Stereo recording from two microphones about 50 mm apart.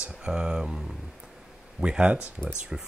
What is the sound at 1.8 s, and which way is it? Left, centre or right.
Speech, right.